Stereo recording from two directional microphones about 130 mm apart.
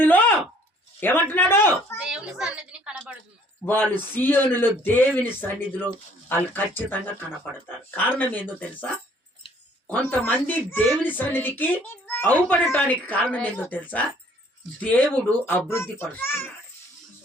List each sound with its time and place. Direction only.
0.0 s a sound: 15° left (ahead or behind)
0.9 s speech: 15° left (ahead or behind)
2.0 s a woman's voice: 5° right (ahead or behind)
3.7 s speech: 15° left (ahead or behind)
6.2 s speech: 15° left (ahead or behind)
7.9 s speech: 15° left (ahead or behind)